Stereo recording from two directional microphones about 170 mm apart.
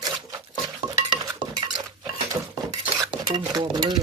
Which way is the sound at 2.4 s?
20° right (ahead or behind).